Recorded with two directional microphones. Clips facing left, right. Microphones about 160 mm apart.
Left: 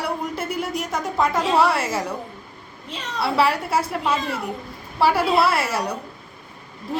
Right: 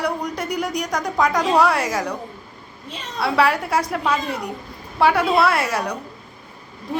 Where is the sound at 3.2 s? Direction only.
5° left (ahead or behind).